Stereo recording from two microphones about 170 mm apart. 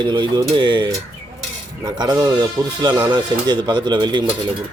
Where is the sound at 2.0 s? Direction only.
25° right (ahead or behind).